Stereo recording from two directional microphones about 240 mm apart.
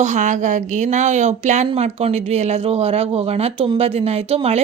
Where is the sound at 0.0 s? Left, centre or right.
Right.